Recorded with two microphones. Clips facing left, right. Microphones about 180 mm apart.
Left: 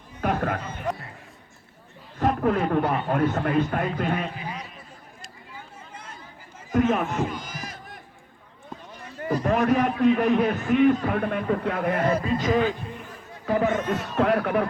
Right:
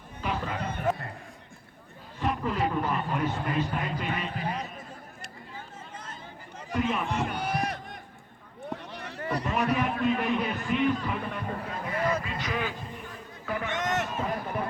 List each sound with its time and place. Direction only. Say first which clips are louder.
0.2 s a sound: left 7 dB; 55° left (ahead or behind)
2.1 s a man's voice: left 7 dB; 50° left (ahead or behind)
4.4 s a sound: right 3 dB; 55° right (ahead or behind)
6.7 s a man's voice: left 7 dB; 45° left (ahead or behind)
7.3 s run: right 5 dB; 65° right (ahead or behind)
8.7 s a sound: right 1 dB; 70° right (ahead or behind)
10.0 s a man's voice: left 7 dB; 45° left (ahead or behind); by 12.1 s 60° left (ahead or behind)
12.1 s a man's voice: left 9 dB; 40° left (ahead or behind)
13.7 s speech: left 2 dB; 75° right (ahead or behind)
14.2 s a man's voice: left 9 dB; 75° left (ahead or behind)